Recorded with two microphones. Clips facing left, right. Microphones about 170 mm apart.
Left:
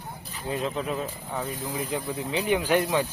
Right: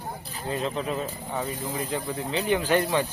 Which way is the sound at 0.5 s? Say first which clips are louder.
Even; 5° left (ahead or behind).